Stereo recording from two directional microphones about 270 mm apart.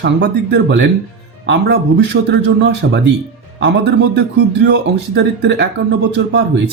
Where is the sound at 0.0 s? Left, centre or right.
Right.